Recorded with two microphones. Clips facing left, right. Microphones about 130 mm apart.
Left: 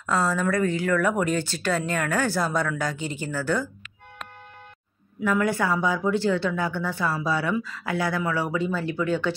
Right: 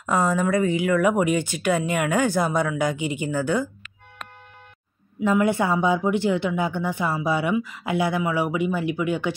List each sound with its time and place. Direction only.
0.0 s speech: 20° right (ahead or behind)
5.2 s a woman's voice: 20° right (ahead or behind)